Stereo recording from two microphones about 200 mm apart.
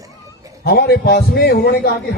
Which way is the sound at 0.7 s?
50° left (ahead or behind).